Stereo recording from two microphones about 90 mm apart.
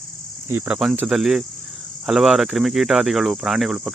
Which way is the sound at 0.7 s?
5° right (ahead or behind).